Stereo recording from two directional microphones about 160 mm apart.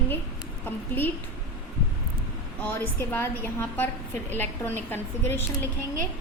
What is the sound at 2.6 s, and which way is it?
A woman's voice, 10° left (ahead or behind).